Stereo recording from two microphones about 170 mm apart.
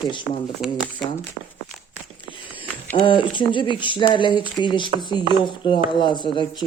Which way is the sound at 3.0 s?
30° left (ahead or behind).